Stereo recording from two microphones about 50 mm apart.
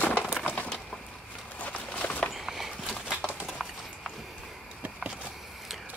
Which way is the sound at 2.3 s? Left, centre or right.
Centre.